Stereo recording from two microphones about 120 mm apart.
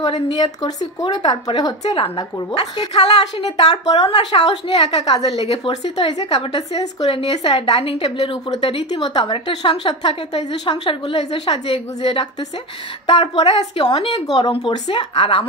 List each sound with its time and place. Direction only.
0.3 s a woman's voice: 35° left (ahead or behind)
1.9 s a woman's voice: 45° left (ahead or behind)
2.5 s a woman's voice: 60° left (ahead or behind)
3.8 s a woman's voice: 40° left (ahead or behind)
4.2 s a woman's voice: 55° left (ahead or behind)
5.0 s a woman's voice: 40° left (ahead or behind)
5.3 s a woman's voice: 60° left (ahead or behind)
9.5 s a woman's voice: 60° left (ahead or behind); by 15.4 s 45° left (ahead or behind)